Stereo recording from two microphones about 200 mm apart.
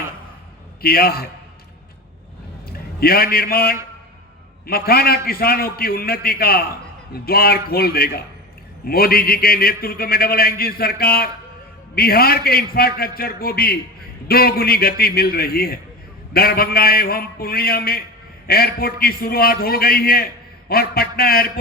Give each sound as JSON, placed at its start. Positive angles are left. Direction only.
{"t": 0.8, "sound": "a man's voice", "side_deg": 50}
{"t": 3.0, "sound": "a man's voice", "side_deg": 50}